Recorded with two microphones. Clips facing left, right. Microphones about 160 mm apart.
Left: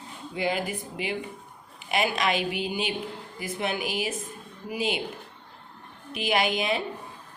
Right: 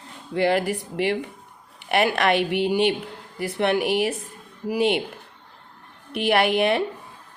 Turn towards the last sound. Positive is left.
turn(degrees=-65)  # may be behind; listen again after turning